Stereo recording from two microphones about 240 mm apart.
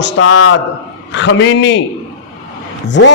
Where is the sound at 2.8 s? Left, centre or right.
Left.